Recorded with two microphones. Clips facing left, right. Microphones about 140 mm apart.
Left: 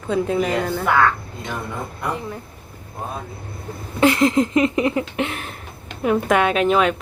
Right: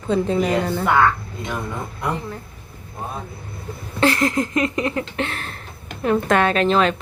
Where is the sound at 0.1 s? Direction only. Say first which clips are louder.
Right 1 dB; 5° left (ahead or behind).